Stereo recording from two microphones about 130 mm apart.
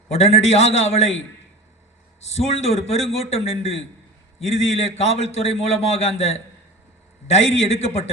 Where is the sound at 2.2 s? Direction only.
55° left (ahead or behind).